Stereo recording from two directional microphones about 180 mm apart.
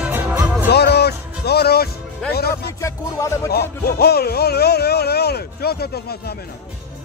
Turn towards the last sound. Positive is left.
turn(degrees=60)  # may be behind; listen again after turning